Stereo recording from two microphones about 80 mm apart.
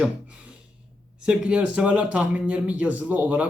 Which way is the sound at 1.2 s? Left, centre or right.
Centre.